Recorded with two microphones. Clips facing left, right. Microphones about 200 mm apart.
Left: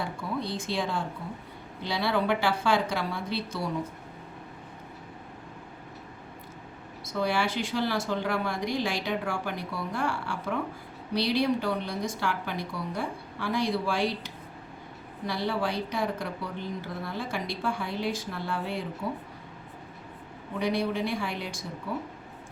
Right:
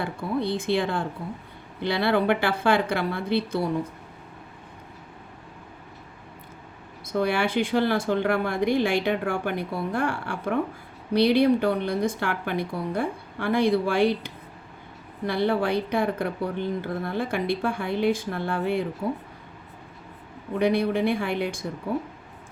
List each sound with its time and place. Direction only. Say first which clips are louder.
0.0 s speech: right 5 dB; 60° right (ahead or behind)
7.0 s speech: right 4 dB; 55° right (ahead or behind)
20.6 s speech: right 6 dB; 55° right (ahead or behind)